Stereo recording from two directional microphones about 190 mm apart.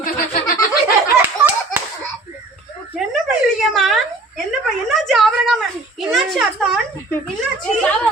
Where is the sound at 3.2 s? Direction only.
Centre (ahead or behind).